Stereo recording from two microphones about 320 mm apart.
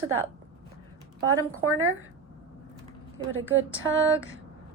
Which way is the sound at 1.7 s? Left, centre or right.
Right.